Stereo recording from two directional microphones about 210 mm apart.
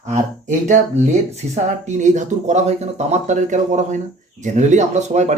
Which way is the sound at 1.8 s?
35° right (ahead or behind).